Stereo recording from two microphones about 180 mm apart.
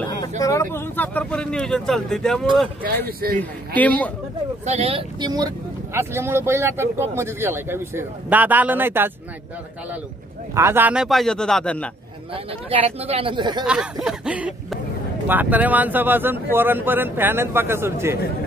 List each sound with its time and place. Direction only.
0.4 s speech: 15° left (ahead or behind)
3.1 s speech: 55° right (ahead or behind)
3.3 s speech: 10° left (ahead or behind)
4.6 s speech: 35° right (ahead or behind); by 9.1 s 10° right (ahead or behind)
10.5 s speech: 15° right (ahead or behind); by 11.9 s 5° left (ahead or behind)
12.6 s speech: 35° right (ahead or behind)
13.7 s speech: 5° right (ahead or behind)